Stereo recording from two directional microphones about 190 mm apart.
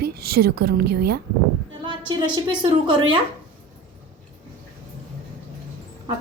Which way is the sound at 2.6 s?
25° right (ahead or behind).